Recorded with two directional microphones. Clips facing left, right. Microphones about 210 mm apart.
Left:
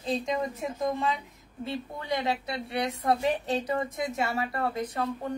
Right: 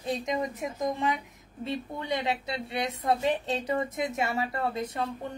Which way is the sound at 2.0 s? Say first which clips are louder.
Left 2 dB; 20° right (ahead or behind).